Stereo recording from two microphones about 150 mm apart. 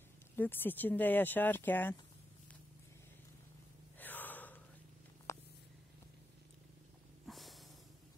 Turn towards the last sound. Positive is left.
turn(degrees=0)  # may be behind; listen again after turning